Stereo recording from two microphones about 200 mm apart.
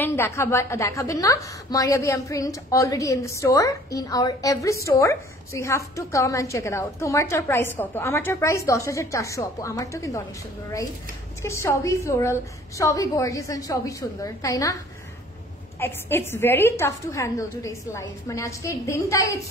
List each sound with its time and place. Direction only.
0.0 s a woman's voice: 10° left (ahead or behind)
11.4 s a woman's voice: 15° left (ahead or behind)
15.8 s a woman's voice: 10° left (ahead or behind)